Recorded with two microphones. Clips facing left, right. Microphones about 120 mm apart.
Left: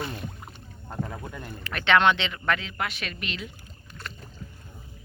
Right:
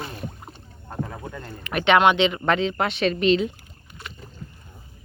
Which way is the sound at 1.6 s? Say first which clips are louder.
Right 4 dB; 20° right (ahead or behind).